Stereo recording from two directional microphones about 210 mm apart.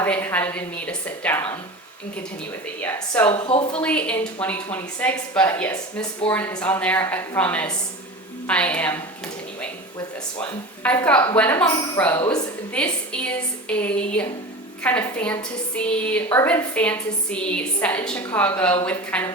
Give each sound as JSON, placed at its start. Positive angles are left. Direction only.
{"t": 0.0, "sound": "a woman's voice", "side_deg": 10}
{"t": 2.8, "sound": "a woman's voice", "side_deg": 15}
{"t": 3.3, "sound": "speech", "side_deg": 25}
{"t": 3.7, "sound": "a woman's voice", "side_deg": 5}
{"t": 10.8, "sound": "a woman's voice", "side_deg": 5}